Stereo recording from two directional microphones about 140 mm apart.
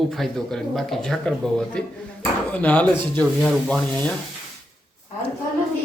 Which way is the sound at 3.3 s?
Centre (ahead or behind).